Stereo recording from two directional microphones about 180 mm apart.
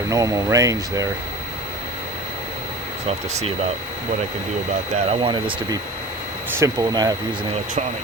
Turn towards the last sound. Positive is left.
turn(degrees=-20)  # may be behind; listen again after turning